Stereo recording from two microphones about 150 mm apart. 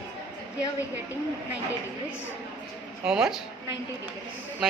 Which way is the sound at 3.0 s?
5° right (ahead or behind).